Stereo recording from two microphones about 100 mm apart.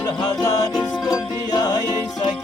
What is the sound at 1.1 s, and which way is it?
Music, 45° left (ahead or behind).